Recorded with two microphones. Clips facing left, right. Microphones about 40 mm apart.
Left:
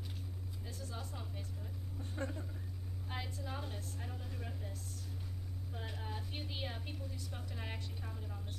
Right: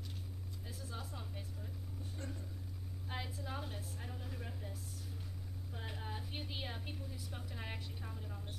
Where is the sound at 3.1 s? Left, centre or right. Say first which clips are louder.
Even; centre.